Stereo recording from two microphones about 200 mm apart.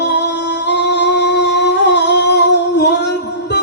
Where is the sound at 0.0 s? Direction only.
60° left (ahead or behind).